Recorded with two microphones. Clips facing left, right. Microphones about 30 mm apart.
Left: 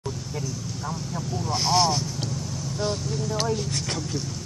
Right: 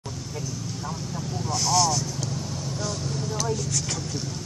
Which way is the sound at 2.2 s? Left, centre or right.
Centre.